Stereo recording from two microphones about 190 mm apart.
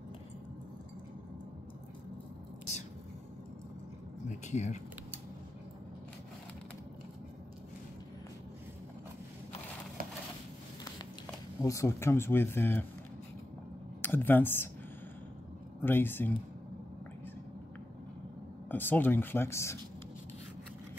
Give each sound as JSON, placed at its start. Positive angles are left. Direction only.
{"t": 4.5, "sound": "speech", "side_deg": 40}
{"t": 11.6, "sound": "speech", "side_deg": 15}
{"t": 14.0, "sound": "speech", "side_deg": 10}
{"t": 15.8, "sound": "speech", "side_deg": 10}
{"t": 18.7, "sound": "speech", "side_deg": 10}